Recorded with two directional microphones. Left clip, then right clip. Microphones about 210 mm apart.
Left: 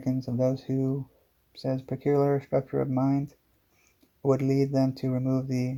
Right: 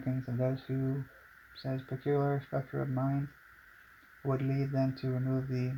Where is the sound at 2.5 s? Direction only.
30° left (ahead or behind).